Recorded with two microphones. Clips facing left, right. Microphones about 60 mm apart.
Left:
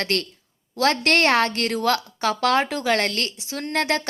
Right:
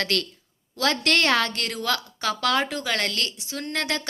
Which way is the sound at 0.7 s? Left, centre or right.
Left.